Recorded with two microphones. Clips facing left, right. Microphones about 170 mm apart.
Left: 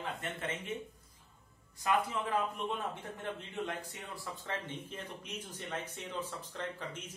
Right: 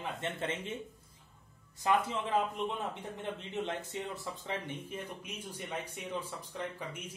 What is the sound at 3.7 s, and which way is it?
Speech, 20° right (ahead or behind).